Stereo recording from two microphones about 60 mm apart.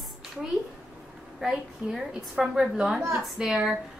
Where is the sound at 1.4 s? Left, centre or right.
Centre.